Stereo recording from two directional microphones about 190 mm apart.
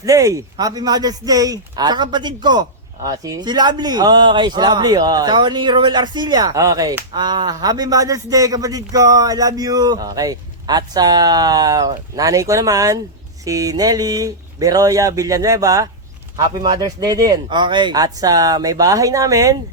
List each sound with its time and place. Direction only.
0.0 s a man's voice: 15° right (ahead or behind)